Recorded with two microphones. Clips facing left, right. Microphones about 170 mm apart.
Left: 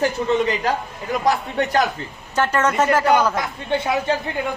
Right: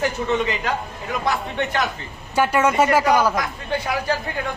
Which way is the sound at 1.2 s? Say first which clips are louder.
Left 4 dB; 40° left (ahead or behind).